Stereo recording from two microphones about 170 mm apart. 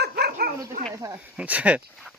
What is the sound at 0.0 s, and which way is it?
Dog, 70° right (ahead or behind).